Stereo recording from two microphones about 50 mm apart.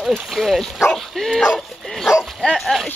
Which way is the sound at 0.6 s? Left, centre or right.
Centre.